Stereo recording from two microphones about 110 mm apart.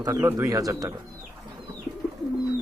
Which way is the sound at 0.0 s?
30° right (ahead or behind).